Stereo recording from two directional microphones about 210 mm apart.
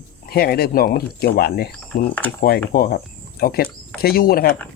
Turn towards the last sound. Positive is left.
turn(degrees=45)  # may be behind; listen again after turning